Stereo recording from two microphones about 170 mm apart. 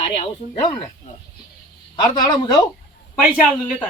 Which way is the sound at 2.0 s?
25° left (ahead or behind).